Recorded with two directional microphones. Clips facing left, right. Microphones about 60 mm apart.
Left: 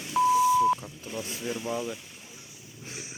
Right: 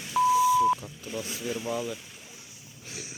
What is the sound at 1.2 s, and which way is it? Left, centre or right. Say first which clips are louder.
Speech: even; left.